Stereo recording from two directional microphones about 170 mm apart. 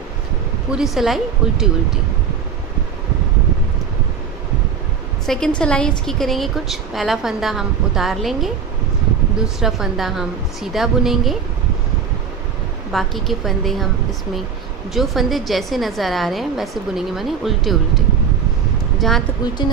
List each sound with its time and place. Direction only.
0.7 s a woman's voice: centre (ahead or behind)
5.2 s a woman's voice: centre (ahead or behind)
12.9 s a woman's voice: centre (ahead or behind)
15.0 s a woman's voice: centre (ahead or behind)